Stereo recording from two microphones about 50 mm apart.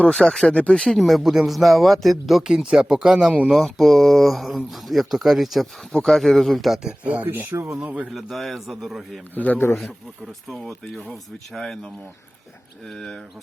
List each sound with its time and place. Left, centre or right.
0.1 s speech: centre
0.4 s speech: left
0.9 s speech: centre
2.6 s speech: centre
3.5 s speech: centre
6.1 s speech: centre
6.8 s speech: right
7.5 s speech: right
8.1 s speech: centre
9.3 s a man's voice: left
10.5 s speech: centre
12.9 s speech: centre